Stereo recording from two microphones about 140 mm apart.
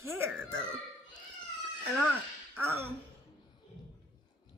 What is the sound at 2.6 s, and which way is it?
Speech, 15° right (ahead or behind).